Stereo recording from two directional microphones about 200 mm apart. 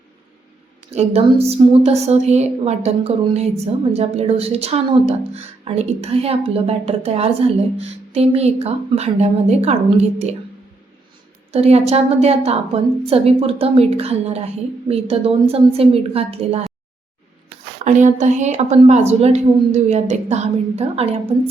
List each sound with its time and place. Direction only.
0.9 s a woman's voice: 30° right (ahead or behind)
11.5 s a woman's voice: 30° right (ahead or behind)
17.8 s a woman's voice: 35° right (ahead or behind)